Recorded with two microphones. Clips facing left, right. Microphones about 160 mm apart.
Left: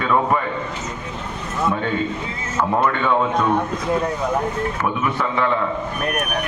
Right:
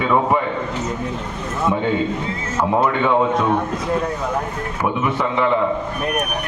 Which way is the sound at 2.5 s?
10° right (ahead or behind).